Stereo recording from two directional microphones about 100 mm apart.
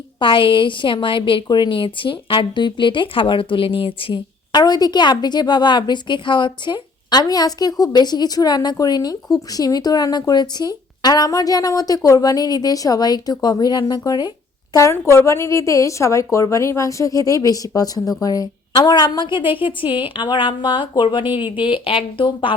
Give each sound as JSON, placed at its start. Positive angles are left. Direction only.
{"t": 0.2, "sound": "a woman's voice", "side_deg": 60}
{"t": 14.8, "sound": "a woman's voice", "side_deg": 30}